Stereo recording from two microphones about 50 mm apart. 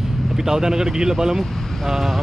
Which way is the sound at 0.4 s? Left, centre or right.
Centre.